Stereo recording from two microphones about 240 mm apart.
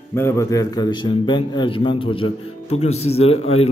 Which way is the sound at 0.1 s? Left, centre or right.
Centre.